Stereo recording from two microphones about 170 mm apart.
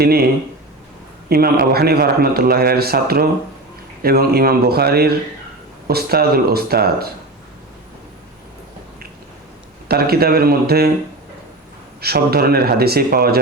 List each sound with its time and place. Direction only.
1.3 s a man's voice: 65° right (ahead or behind)
9.9 s a man's voice: 65° right (ahead or behind)
11.9 s a man's voice: 65° right (ahead or behind)